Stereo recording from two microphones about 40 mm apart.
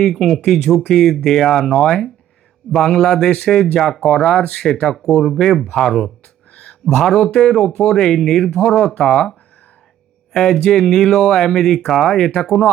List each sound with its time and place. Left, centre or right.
0.0 s speech: centre
4.2 s speech: left
4.8 s speech: centre
6.5 s a sound: left
6.8 s speech: centre
10.3 s speech: centre